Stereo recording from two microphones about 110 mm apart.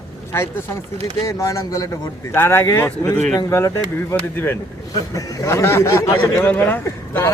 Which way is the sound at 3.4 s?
30° left (ahead or behind).